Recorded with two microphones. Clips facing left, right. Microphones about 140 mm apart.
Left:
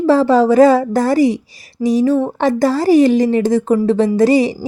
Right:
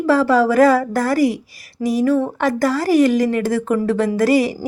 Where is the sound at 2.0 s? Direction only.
25° left (ahead or behind).